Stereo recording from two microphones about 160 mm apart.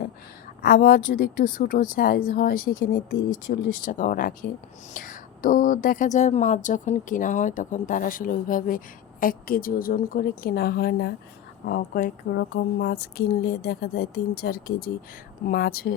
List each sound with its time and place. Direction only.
0.6 s a woman's voice: 70° left (ahead or behind)
12.3 s a woman's voice: 90° left; by 16.0 s 70° left (ahead or behind)